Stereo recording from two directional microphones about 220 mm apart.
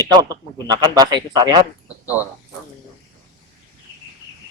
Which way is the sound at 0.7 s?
20° right (ahead or behind).